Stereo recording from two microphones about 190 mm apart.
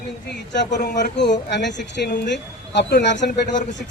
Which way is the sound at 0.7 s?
65° left (ahead or behind).